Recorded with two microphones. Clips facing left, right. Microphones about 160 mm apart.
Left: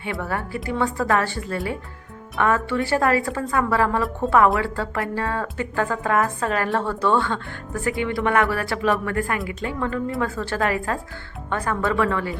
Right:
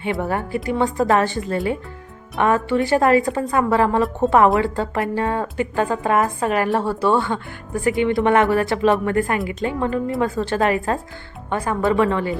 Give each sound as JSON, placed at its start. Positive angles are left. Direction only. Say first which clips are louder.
{"t": 0.0, "sound": "a woman's voice", "louder": "right 5 dB", "side_deg": -20}